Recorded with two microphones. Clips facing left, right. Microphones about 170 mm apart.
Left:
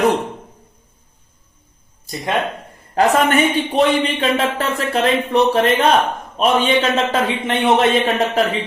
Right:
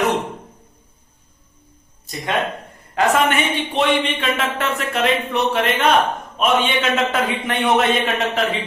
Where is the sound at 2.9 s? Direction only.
35° left (ahead or behind).